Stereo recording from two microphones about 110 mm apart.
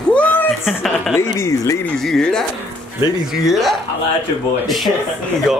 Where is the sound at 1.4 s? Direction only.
30° left (ahead or behind).